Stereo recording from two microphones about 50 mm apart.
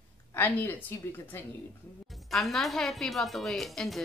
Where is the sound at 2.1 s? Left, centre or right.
Centre.